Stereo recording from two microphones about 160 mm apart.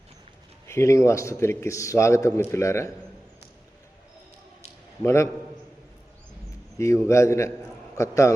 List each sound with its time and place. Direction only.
0.7 s a man's voice: 20° left (ahead or behind)
5.0 s a man's voice: 15° left (ahead or behind)
6.7 s a man's voice: 20° left (ahead or behind)